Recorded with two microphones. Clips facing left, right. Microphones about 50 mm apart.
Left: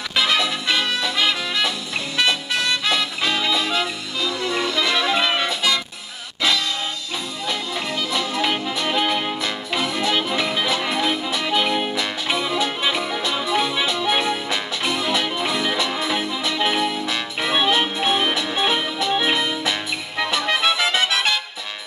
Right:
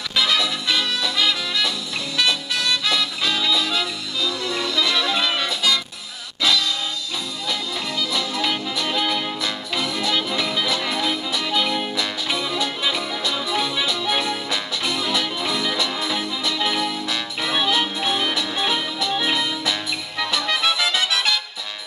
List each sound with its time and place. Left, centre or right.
0.1 s music: centre
8.1 s music: left